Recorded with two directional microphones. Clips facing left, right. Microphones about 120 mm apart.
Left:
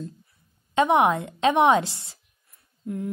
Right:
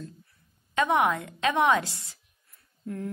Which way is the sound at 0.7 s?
25° left (ahead or behind).